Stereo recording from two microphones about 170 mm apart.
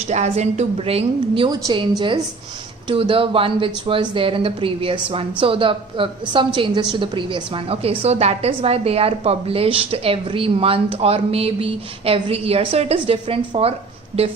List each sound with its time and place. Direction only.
0.1 s speech: 40° right (ahead or behind)
1.5 s a woman's voice: 25° right (ahead or behind)